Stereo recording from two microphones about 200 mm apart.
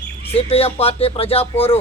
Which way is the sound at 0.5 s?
30° left (ahead or behind).